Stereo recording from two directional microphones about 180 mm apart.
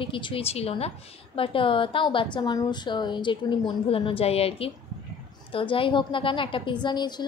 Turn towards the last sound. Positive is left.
turn(degrees=25)  # may be behind; listen again after turning